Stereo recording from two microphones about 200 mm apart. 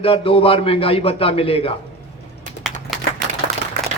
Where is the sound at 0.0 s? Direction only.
30° left (ahead or behind).